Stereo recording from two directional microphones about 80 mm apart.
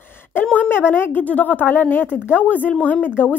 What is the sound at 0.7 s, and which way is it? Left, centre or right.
Speech, left.